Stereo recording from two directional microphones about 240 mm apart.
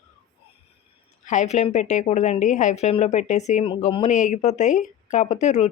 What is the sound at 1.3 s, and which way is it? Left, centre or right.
A woman's voice, left.